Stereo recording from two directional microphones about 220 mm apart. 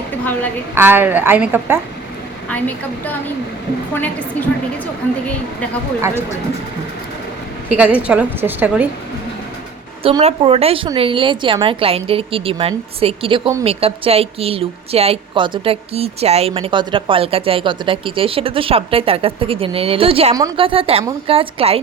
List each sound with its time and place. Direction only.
0.8 s a woman's voice: 10° right (ahead or behind)
2.5 s a woman's voice: 5° left (ahead or behind)
7.7 s a woman's voice: 5° right (ahead or behind)
10.0 s a woman's voice: 25° right (ahead or behind)